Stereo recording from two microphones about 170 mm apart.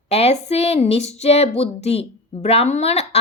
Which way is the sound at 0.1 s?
40° left (ahead or behind).